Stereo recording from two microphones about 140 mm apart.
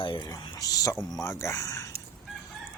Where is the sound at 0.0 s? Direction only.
35° left (ahead or behind).